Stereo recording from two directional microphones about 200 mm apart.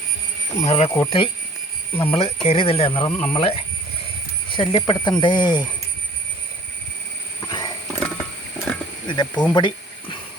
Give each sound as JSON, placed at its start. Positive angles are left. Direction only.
{"t": 0.6, "sound": "speech", "side_deg": 30}
{"t": 0.9, "sound": "speech", "side_deg": 15}
{"t": 2.0, "sound": "speech", "side_deg": 30}
{"t": 7.4, "sound": "wild animals", "side_deg": 20}
{"t": 7.9, "sound": "mechanisms", "side_deg": 5}
{"t": 9.0, "sound": "speech", "side_deg": 20}
{"t": 9.5, "sound": "a sound", "side_deg": 20}